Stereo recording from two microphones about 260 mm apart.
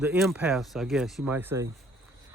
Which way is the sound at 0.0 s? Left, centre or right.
Centre.